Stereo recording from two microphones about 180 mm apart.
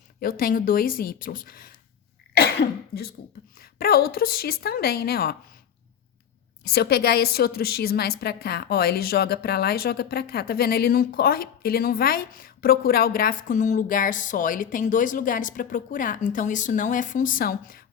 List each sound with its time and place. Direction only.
0.2 s speech: 50° left (ahead or behind)
2.3 s cough: 60° left (ahead or behind)
3.6 s a woman's voice: 55° left (ahead or behind)
6.7 s a woman's voice: 60° left (ahead or behind)